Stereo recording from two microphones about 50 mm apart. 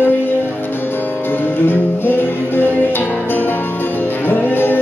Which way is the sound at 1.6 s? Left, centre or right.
Left.